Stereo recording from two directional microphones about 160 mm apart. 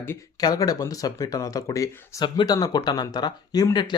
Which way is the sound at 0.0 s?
20° left (ahead or behind).